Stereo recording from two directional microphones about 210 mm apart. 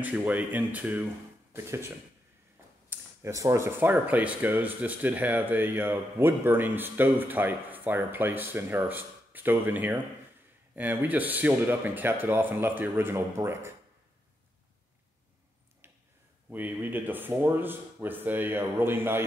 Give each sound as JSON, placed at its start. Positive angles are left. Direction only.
{"t": 0.0, "sound": "speech", "side_deg": -10}
{"t": 2.9, "sound": "speech", "side_deg": -10}
{"t": 16.4, "sound": "speech", "side_deg": -10}